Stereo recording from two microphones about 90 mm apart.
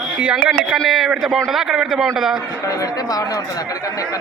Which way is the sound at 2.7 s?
40° left (ahead or behind).